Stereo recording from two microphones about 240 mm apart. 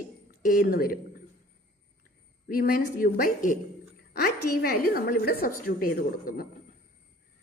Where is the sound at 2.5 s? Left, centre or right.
Left.